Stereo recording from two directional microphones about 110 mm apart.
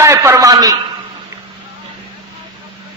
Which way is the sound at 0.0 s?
25° right (ahead or behind).